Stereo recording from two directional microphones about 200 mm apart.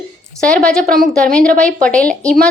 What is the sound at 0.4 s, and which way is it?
Speech, 5° left (ahead or behind).